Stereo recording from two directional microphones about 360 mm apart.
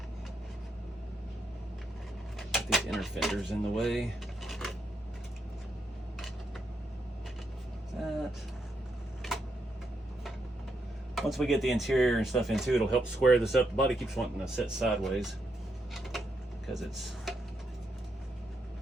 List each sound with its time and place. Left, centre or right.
2.4 s speech: centre
8.0 s speech: centre
11.1 s speech: centre
16.6 s speech: centre